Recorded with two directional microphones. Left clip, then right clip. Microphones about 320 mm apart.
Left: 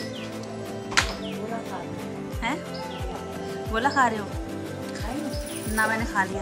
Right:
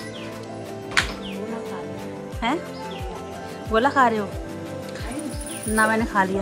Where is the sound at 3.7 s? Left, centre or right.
Centre.